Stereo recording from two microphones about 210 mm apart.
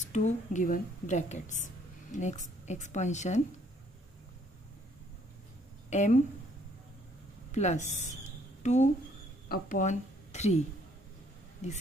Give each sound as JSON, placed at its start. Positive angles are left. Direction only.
{"t": 0.0, "sound": "a woman's voice", "side_deg": 35}
{"t": 5.9, "sound": "speech", "side_deg": 35}
{"t": 7.5, "sound": "a woman's voice", "side_deg": 35}